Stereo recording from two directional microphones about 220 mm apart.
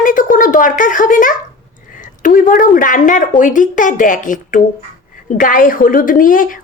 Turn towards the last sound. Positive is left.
turn(degrees=40)  # may be behind; listen again after turning